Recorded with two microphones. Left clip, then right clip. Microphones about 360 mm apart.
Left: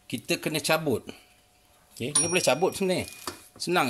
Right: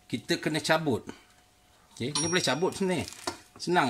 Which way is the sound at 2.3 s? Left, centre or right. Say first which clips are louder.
Left 4 dB; centre.